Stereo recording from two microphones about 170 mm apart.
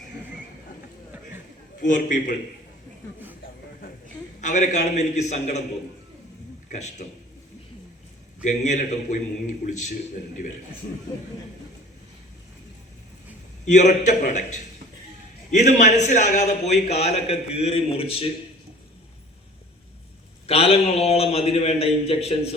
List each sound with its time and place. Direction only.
1.8 s a man's voice: 50° left (ahead or behind)
4.4 s a man's voice: 45° left (ahead or behind)
6.7 s a man's voice: 50° left (ahead or behind)
8.4 s a man's voice: 45° left (ahead or behind)
13.7 s a man's voice: 45° left (ahead or behind)
20.5 s a man's voice: 35° left (ahead or behind)